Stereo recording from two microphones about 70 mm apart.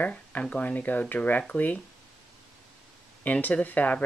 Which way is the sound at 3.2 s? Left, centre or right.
Left.